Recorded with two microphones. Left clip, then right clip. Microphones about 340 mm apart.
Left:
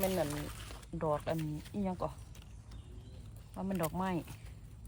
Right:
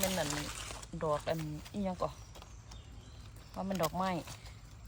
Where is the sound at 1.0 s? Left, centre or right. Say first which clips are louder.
Even; centre.